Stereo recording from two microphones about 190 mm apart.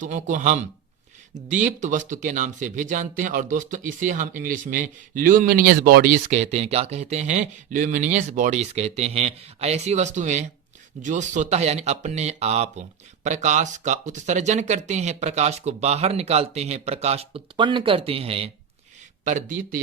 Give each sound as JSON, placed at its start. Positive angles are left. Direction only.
{"t": 0.0, "sound": "speech", "side_deg": -40}